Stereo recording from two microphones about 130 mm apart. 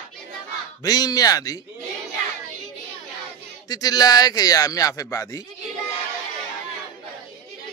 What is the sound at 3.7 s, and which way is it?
A man's voice, 30° left (ahead or behind).